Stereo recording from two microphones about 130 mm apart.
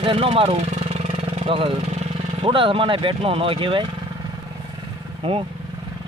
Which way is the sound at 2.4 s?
45° right (ahead or behind).